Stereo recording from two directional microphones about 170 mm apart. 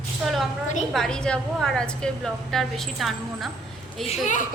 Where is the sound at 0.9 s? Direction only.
5° left (ahead or behind).